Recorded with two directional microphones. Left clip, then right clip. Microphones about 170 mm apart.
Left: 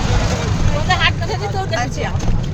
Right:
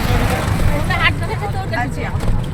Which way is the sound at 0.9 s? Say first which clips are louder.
Left 1 dB; 80° left.